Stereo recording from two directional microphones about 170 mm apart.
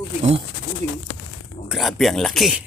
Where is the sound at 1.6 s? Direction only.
Centre (ahead or behind).